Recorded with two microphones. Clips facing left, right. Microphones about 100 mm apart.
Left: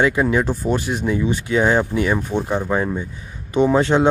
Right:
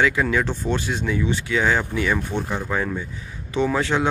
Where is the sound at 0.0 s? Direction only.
20° left (ahead or behind).